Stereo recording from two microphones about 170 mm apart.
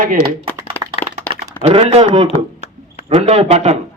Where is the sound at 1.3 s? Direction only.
40° right (ahead or behind).